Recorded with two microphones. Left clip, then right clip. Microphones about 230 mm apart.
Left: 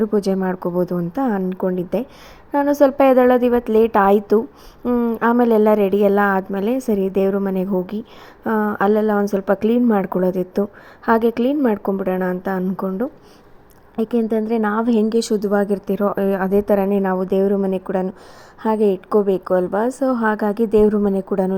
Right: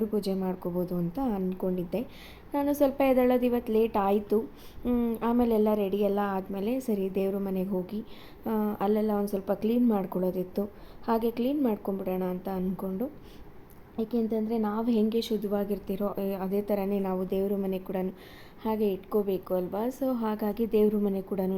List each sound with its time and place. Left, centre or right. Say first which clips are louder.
0.0 s a woman's voice: left 11 dB; left
14.2 s a woman's voice: left 10 dB; left